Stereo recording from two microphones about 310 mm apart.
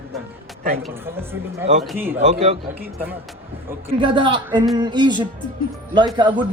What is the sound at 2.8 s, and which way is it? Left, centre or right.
A man's voice, centre.